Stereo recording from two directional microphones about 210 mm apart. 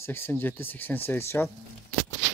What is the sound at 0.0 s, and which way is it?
Speech, 10° left (ahead or behind).